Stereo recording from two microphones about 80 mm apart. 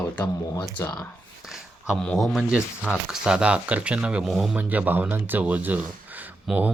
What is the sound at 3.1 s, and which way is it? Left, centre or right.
Speech, centre.